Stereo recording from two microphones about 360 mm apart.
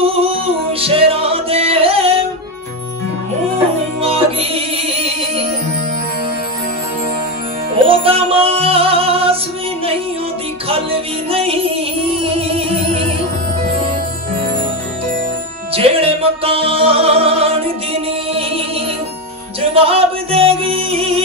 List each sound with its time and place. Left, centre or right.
0.0 s music: centre
4.0 s music: centre
7.8 s music: centre
10.7 s music: centre
15.7 s music: centre
19.7 s music: centre